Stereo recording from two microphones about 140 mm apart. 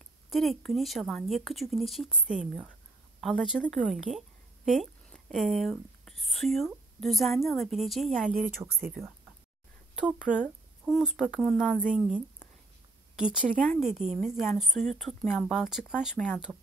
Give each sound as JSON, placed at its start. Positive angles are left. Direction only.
{"t": 0.3, "sound": "speech", "side_deg": 0}
{"t": 8.6, "sound": "speech", "side_deg": -25}
{"t": 9.9, "sound": "speech", "side_deg": -5}
{"t": 13.2, "sound": "a woman's voice", "side_deg": -5}